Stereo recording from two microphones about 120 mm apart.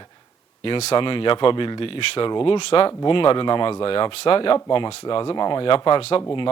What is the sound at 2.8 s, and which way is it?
Speech, 45° left (ahead or behind).